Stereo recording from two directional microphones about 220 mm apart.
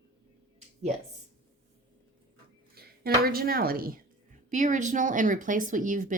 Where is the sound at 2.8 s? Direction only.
45° right (ahead or behind).